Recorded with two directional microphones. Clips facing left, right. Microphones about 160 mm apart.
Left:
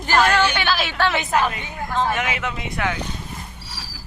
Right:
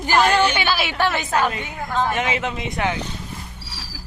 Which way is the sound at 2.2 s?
25° right (ahead or behind).